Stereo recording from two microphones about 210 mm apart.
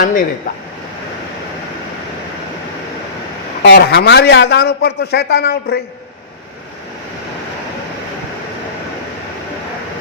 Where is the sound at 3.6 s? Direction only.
50° left (ahead or behind).